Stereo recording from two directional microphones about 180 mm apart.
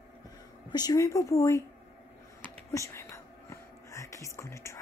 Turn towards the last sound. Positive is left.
turn(degrees=15)  # may be behind; listen again after turning